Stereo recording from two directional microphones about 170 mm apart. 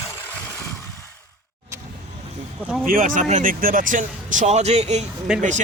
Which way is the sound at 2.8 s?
55° right (ahead or behind).